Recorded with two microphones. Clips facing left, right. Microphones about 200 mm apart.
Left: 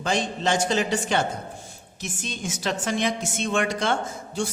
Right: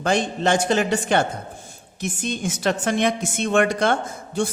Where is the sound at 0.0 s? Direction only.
55° right (ahead or behind).